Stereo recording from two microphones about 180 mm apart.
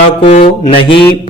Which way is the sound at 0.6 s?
30° left (ahead or behind).